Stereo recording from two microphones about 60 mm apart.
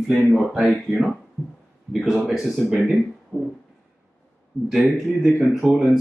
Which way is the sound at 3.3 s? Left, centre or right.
Right.